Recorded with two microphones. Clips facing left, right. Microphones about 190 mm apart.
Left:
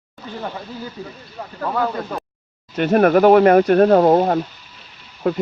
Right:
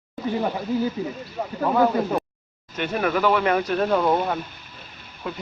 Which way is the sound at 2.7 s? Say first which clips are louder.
Left 10 dB; 50° left (ahead or behind).